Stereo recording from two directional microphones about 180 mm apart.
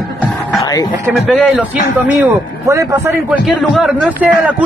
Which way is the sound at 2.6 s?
15° right (ahead or behind).